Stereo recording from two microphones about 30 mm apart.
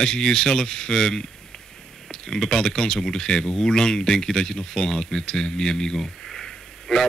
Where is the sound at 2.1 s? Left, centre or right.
Centre.